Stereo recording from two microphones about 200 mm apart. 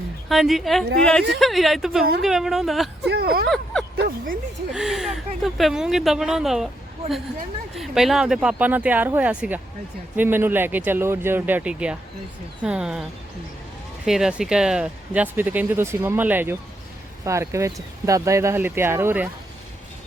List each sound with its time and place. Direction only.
0.3 s speech: centre (ahead or behind)
3.1 s speech: 50° right (ahead or behind)
3.5 s a sound: 5° left (ahead or behind)
3.9 s speech: 50° right (ahead or behind)
4.7 s speech: centre (ahead or behind)
7.8 s speech: centre (ahead or behind)